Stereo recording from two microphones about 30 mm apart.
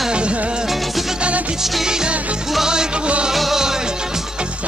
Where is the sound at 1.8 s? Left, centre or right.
Right.